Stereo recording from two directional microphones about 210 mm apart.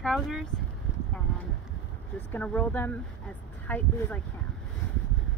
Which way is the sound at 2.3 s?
5° left (ahead or behind).